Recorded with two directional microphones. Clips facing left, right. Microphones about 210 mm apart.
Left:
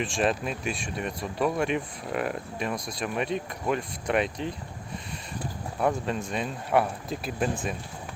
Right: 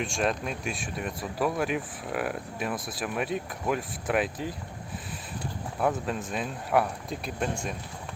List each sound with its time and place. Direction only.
0.0 s speech: centre (ahead or behind)
5.8 s speech: centre (ahead or behind)